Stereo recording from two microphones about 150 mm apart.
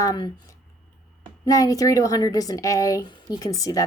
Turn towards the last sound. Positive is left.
turn(degrees=25)  # may be behind; listen again after turning